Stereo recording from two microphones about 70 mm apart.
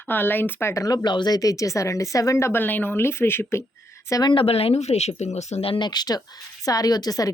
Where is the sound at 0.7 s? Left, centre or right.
Left.